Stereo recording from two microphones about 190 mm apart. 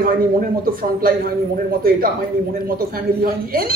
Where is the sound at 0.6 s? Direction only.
50° right (ahead or behind).